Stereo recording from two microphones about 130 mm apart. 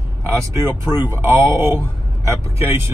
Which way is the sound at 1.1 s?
20° right (ahead or behind).